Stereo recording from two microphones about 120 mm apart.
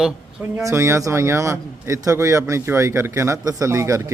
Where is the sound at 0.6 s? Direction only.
25° right (ahead or behind).